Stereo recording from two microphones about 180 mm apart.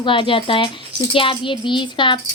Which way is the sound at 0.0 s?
30° left (ahead or behind).